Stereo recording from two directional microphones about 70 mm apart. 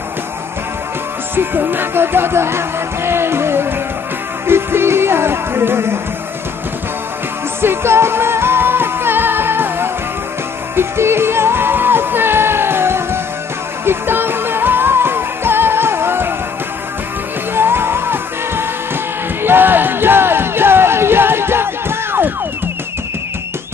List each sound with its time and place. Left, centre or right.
1.3 s music: right
7.6 s music: right
17.6 s music: right